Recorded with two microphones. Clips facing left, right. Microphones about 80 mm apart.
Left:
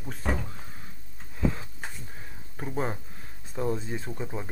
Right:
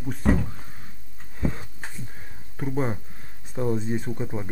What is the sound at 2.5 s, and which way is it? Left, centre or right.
Speech, centre.